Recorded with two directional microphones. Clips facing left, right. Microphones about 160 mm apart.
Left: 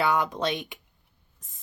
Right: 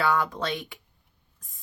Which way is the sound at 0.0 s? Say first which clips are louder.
Left 1 dB; 20° left (ahead or behind).